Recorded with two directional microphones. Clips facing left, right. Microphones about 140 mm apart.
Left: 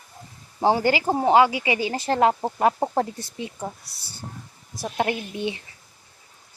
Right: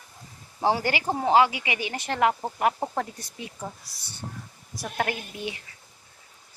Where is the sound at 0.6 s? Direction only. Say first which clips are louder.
Left 5 dB; 30° left (ahead or behind).